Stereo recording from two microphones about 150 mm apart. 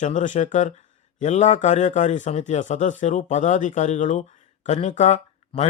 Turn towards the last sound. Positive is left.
turn(degrees=45)  # may be behind; listen again after turning